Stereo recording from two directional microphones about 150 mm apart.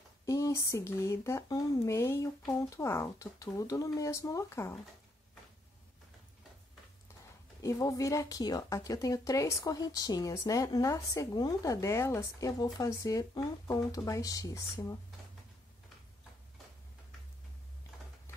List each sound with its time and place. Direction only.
0.2 s a woman's voice: 20° left (ahead or behind)
7.6 s a woman's voice: 20° left (ahead or behind)